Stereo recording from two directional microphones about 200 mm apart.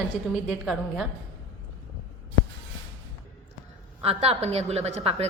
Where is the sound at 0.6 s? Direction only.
Centre (ahead or behind).